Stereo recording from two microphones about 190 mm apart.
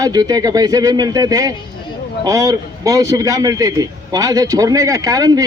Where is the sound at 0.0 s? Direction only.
20° right (ahead or behind).